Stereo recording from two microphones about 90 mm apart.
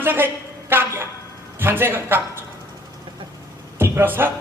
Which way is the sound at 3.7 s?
25° right (ahead or behind).